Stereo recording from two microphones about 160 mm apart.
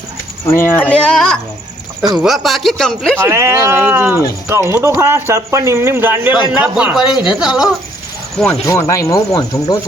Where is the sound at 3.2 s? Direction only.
15° right (ahead or behind).